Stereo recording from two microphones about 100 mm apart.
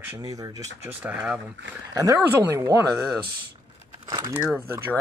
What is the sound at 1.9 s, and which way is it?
Speech, 35° right (ahead or behind).